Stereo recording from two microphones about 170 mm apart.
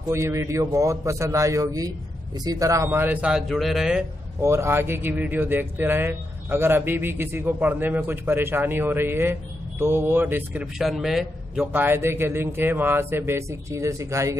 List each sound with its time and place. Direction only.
0.1 s speech: 15° right (ahead or behind); by 4.0 s centre (ahead or behind)
4.4 s speech: 15° right (ahead or behind)